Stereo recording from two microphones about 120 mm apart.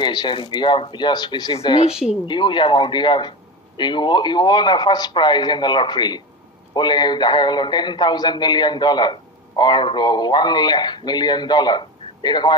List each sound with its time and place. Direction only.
0.0 s speech: 40° left (ahead or behind)